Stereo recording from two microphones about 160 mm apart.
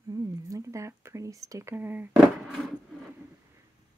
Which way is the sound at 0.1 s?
20° right (ahead or behind).